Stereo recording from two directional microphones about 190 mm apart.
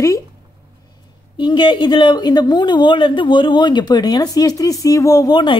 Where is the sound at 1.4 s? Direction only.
25° left (ahead or behind).